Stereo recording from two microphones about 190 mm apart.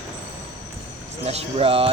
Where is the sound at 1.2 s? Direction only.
30° right (ahead or behind).